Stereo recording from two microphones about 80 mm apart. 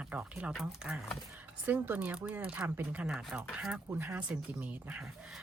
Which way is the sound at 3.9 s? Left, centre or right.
Right.